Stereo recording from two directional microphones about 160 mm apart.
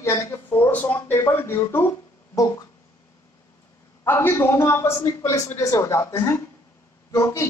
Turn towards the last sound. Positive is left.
turn(degrees=15)  # may be behind; listen again after turning